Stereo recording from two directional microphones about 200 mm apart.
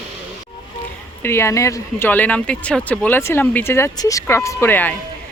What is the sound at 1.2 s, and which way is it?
Speech, 10° left (ahead or behind).